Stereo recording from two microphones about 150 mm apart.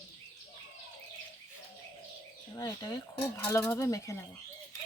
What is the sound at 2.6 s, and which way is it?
Speech, 25° left (ahead or behind).